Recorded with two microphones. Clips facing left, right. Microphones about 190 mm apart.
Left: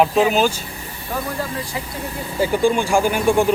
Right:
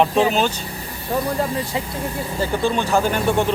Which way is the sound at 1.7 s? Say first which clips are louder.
Right 3 dB; 25° right (ahead or behind).